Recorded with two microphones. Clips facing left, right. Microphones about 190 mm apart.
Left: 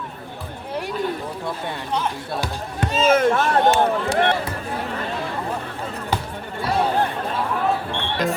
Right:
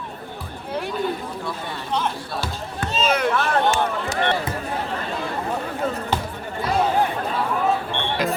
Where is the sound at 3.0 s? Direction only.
45° left (ahead or behind).